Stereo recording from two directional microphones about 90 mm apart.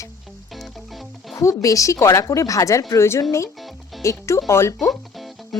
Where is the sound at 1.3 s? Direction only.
40° left (ahead or behind).